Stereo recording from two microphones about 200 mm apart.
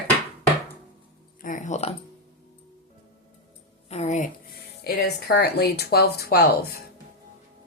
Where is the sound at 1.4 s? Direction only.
40° left (ahead or behind).